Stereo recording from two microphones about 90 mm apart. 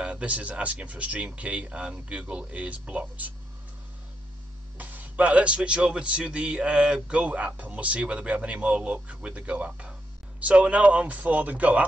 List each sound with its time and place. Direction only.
0.0 s speech: 15° right (ahead or behind)
4.7 s speech: 20° right (ahead or behind)